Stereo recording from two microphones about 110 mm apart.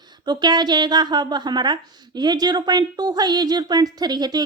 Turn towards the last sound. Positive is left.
turn(degrees=-40)  # may be behind; listen again after turning